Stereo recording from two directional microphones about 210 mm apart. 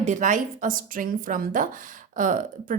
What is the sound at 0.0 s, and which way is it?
Speech, 35° right (ahead or behind).